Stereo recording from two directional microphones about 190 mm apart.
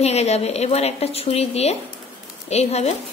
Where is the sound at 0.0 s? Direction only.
35° left (ahead or behind).